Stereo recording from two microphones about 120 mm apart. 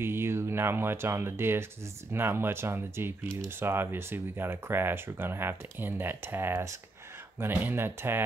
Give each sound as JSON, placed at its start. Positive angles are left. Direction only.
{"t": 0.0, "sound": "speech", "side_deg": -20}